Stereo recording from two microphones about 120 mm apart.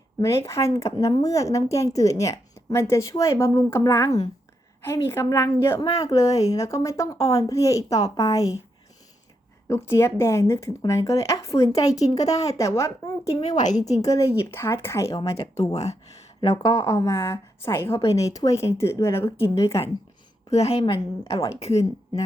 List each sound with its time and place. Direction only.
0.2 s a woman's voice: 25° left (ahead or behind)
9.6 s a woman's voice: 20° left (ahead or behind)
13.6 s a woman's voice: 85° left
14.0 s a woman's voice: 25° left (ahead or behind)
15.7 s a woman's voice: 65° left (ahead or behind)
16.7 s a woman's voice: 25° left (ahead or behind)
20.5 s a woman's voice: 60° left (ahead or behind)
20.8 s a woman's voice: 45° left (ahead or behind)